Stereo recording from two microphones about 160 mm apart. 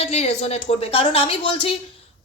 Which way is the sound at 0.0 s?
40° left (ahead or behind).